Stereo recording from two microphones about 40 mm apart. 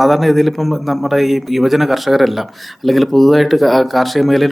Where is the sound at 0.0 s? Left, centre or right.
Centre.